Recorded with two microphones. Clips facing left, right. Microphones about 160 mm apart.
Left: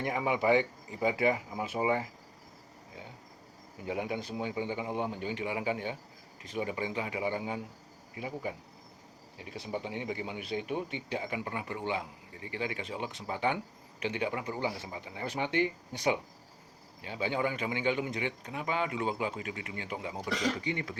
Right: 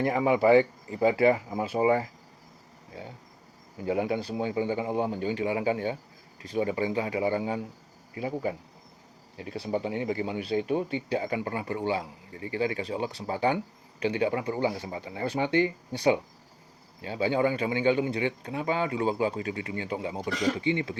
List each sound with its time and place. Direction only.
0.0 s a man's voice: 40° right (ahead or behind)
3.8 s a man's voice: 35° right (ahead or behind)
9.4 s a man's voice: 40° right (ahead or behind)